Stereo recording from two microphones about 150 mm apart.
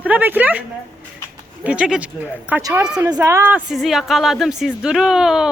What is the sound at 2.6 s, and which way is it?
Speech, 25° right (ahead or behind).